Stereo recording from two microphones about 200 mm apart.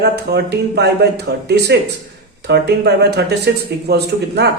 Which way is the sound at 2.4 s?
55° right (ahead or behind).